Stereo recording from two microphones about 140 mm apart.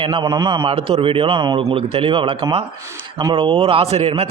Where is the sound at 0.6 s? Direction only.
40° right (ahead or behind).